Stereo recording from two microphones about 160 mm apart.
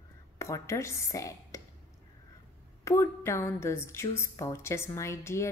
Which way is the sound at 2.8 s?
15° left (ahead or behind).